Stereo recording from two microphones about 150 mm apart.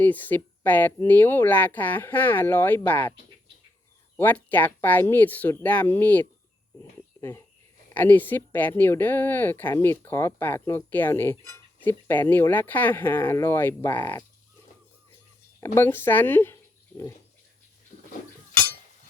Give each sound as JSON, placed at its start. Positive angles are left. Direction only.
{"t": 0.0, "sound": "speech", "side_deg": 10}
{"t": 4.2, "sound": "speech", "side_deg": 10}
{"t": 15.6, "sound": "speech", "side_deg": 15}
{"t": 17.9, "sound": "a sound", "side_deg": 55}